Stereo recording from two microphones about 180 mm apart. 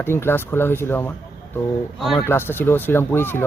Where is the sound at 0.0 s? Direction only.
15° left (ahead or behind).